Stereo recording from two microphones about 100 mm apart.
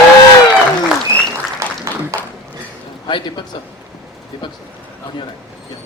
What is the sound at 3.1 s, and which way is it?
Speech, 50° left (ahead or behind).